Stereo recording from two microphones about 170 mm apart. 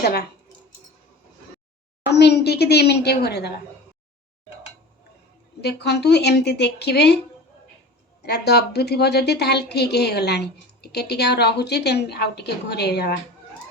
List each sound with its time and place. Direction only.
0.0 s a woman's voice: 70° left (ahead or behind)
2.0 s a woman's voice: 75° left (ahead or behind)
5.5 s a woman's voice: 75° left (ahead or behind)
8.2 s a woman's voice: 70° left (ahead or behind)